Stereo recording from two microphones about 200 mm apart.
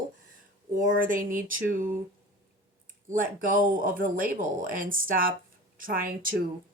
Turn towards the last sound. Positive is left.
turn(degrees=-45)  # may be behind; listen again after turning